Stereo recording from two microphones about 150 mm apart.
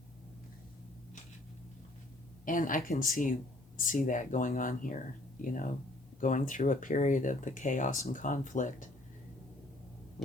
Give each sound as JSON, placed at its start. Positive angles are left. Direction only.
{"t": 2.4, "sound": "speech", "side_deg": 65}